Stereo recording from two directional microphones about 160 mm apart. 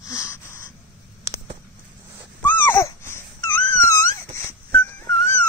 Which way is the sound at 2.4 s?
15° left (ahead or behind).